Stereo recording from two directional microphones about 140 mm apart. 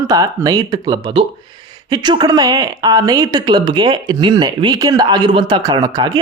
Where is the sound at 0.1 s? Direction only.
25° right (ahead or behind).